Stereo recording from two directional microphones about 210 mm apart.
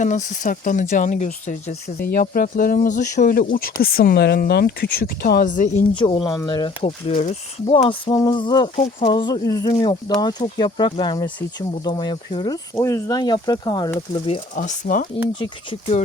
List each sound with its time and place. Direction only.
0.0 s speech: 35° left (ahead or behind)
5.9 s speech: 25° left (ahead or behind)
6.8 s speech: 35° left (ahead or behind)